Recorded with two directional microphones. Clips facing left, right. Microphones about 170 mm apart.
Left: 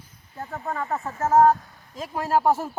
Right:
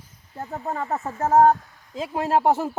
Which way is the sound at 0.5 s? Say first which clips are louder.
Right 1 dB; 25° right (ahead or behind).